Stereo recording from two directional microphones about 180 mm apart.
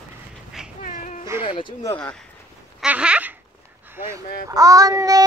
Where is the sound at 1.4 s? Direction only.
30° left (ahead or behind).